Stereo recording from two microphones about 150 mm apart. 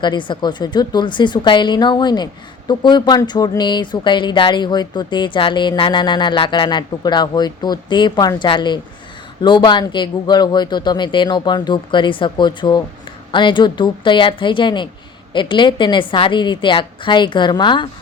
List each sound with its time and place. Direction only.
0.0 s a woman's voice: 30° left (ahead or behind)